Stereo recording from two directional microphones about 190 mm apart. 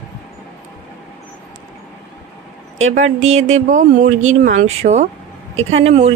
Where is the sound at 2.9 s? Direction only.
40° right (ahead or behind).